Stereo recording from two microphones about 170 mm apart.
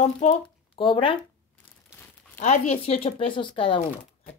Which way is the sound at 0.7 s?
30° left (ahead or behind).